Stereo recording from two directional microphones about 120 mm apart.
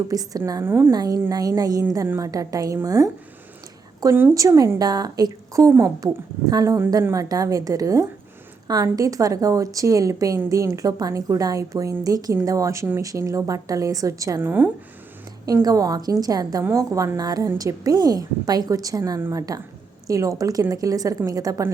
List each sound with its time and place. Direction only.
0.1 s a woman's voice: 30° right (ahead or behind)
0.6 s a woman's voice: 20° right (ahead or behind)
0.9 s a woman's voice: 30° right (ahead or behind)
4.1 s a woman's voice: 25° right (ahead or behind)
15.6 s a woman's voice: 30° right (ahead or behind)